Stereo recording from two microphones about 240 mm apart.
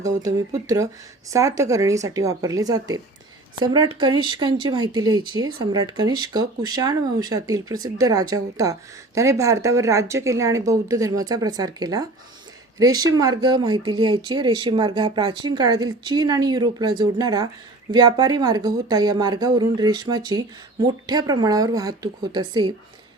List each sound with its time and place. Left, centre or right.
0.2 s speech: centre